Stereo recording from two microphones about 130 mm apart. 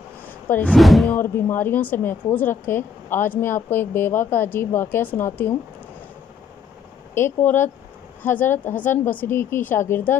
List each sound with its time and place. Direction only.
0.5 s speech: 15° left (ahead or behind)
0.7 s speech: centre (ahead or behind)
1.1 s speech: 15° left (ahead or behind)
7.2 s speech: 15° left (ahead or behind)